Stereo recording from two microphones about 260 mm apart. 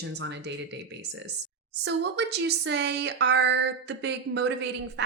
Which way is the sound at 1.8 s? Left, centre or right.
Right.